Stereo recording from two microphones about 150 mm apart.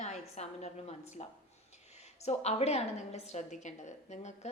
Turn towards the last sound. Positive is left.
turn(degrees=50)  # may be behind; listen again after turning